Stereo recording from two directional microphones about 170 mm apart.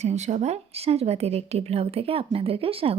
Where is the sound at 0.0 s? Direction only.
40° right (ahead or behind).